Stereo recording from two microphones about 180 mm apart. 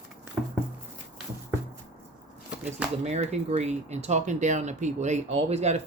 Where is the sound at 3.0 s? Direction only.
35° right (ahead or behind).